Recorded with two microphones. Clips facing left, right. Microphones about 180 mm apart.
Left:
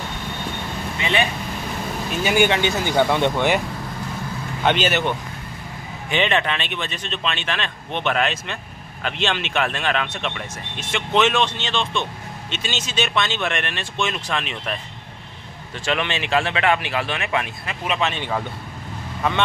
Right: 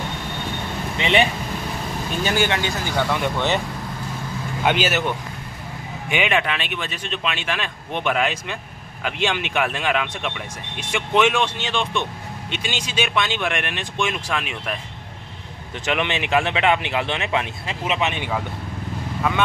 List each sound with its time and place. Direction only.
0.9 s speech: 25° right (ahead or behind)
2.2 s speech: 15° left (ahead or behind)
4.6 s speech: 5° right (ahead or behind)
15.8 s speech: 20° right (ahead or behind)